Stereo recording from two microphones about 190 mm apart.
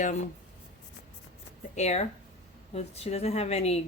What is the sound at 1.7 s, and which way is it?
A woman's voice, 35° left (ahead or behind).